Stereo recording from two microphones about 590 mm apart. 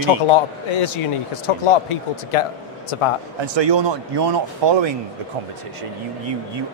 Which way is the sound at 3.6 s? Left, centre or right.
Right.